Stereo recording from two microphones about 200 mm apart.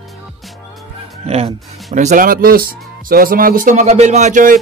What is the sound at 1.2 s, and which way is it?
Speech, 30° right (ahead or behind).